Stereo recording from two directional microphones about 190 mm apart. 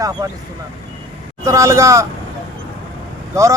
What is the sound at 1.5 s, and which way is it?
Speech, 15° right (ahead or behind).